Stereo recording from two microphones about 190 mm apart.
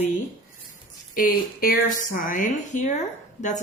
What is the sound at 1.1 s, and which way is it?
A woman's voice, 50° left (ahead or behind).